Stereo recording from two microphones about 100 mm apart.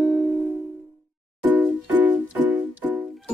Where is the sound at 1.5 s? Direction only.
15° right (ahead or behind).